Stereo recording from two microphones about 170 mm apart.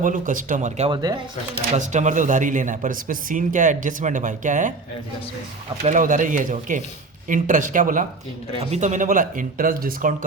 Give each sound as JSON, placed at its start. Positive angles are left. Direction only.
{"t": 0.0, "sound": "speech", "side_deg": -50}
{"t": 0.9, "sound": "speech", "side_deg": -25}
{"t": 1.7, "sound": "speech", "side_deg": -45}
{"t": 5.8, "sound": "speech", "side_deg": -50}